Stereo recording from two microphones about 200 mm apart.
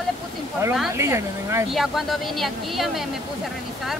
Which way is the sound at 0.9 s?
15° right (ahead or behind).